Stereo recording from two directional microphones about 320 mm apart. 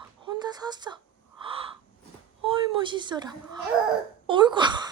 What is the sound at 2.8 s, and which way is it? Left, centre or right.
Speech, centre.